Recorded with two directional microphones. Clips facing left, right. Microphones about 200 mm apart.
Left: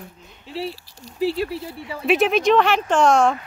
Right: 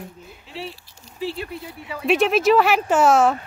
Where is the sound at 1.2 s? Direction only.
40° left (ahead or behind).